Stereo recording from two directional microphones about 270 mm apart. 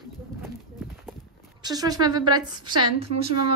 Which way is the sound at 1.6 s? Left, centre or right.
Centre.